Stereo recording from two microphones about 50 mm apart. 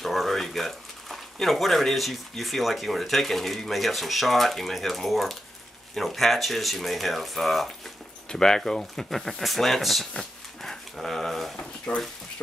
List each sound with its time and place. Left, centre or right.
0.0 s speech: centre
8.3 s speech: centre
11.5 s speech: left